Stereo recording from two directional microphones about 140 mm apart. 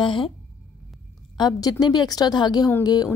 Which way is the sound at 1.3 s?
30° left (ahead or behind).